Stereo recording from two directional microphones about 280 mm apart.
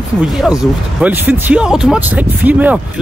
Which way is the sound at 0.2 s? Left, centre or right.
Centre.